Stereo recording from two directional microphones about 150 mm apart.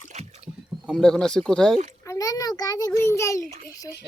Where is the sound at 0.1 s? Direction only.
50° right (ahead or behind).